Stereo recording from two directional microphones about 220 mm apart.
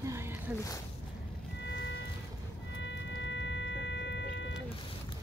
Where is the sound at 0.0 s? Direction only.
10° right (ahead or behind).